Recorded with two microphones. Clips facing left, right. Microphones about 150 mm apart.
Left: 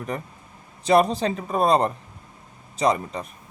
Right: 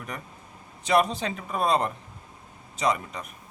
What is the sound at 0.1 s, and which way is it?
Speech, 30° left (ahead or behind).